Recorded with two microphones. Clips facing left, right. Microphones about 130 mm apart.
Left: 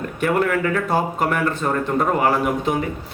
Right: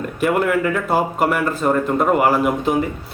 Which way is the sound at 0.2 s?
10° right (ahead or behind).